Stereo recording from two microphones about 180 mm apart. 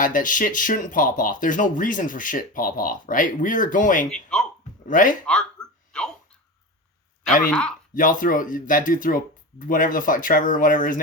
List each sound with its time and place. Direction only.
0.0 s speech: 45° left (ahead or behind)
4.1 s speech: 5° left (ahead or behind)
4.9 s speech: 45° left (ahead or behind)
5.2 s a sound: 5° left (ahead or behind)
7.5 s speech: 5° left (ahead or behind)
7.9 s speech: 50° left (ahead or behind)